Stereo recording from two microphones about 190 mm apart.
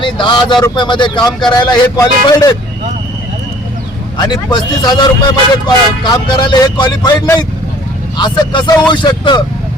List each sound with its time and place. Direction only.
0.0 s a man's voice: 25° left (ahead or behind)
4.2 s a man's voice: 20° left (ahead or behind)